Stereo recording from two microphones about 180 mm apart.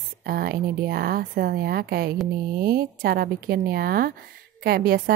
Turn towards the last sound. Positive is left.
turn(degrees=-60)  # may be behind; listen again after turning